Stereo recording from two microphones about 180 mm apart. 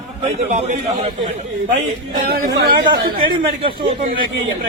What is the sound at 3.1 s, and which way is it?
Speech, 30° right (ahead or behind).